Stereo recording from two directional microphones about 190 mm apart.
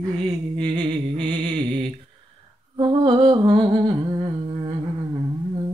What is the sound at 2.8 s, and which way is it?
Humming, 25° right (ahead or behind).